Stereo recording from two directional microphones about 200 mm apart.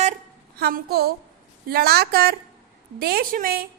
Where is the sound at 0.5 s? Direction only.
50° right (ahead or behind).